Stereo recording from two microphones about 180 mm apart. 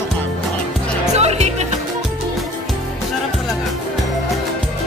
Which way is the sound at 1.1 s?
35° right (ahead or behind).